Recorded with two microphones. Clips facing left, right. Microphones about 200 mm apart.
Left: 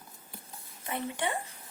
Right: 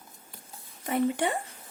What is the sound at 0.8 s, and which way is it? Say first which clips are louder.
Speech: right 8 dB; 45° right (ahead or behind).